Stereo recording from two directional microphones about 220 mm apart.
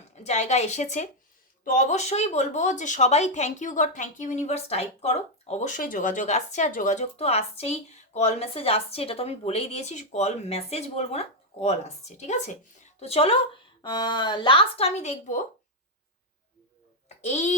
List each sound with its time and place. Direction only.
0.2 s a woman's voice: 30° left (ahead or behind)
17.2 s a child's voice: 30° left (ahead or behind)